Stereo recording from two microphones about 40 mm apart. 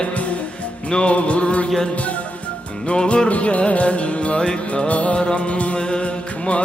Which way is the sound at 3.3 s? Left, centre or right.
Left.